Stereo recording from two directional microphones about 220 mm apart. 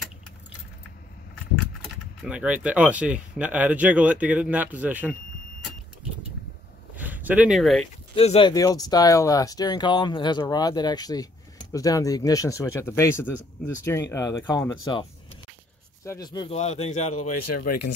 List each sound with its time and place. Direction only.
2.2 s speech: 5° right (ahead or behind)
7.0 s speech: 10° right (ahead or behind)
8.1 s speech: 25° left (ahead or behind)
16.5 s speech: 30° left (ahead or behind)
17.1 s speech: 90° left